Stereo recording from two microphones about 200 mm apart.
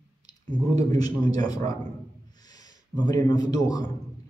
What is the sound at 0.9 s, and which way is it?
A man's voice, 20° left (ahead or behind).